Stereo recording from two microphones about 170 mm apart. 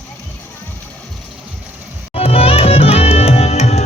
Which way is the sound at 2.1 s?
35° left (ahead or behind).